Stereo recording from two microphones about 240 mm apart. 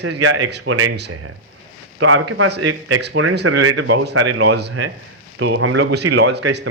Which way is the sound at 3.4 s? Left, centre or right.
Right.